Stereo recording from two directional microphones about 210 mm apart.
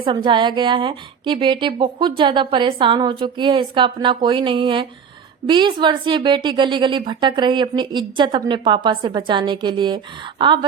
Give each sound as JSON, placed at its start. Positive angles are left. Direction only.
{"t": 0.0, "sound": "a woman's voice", "side_deg": -25}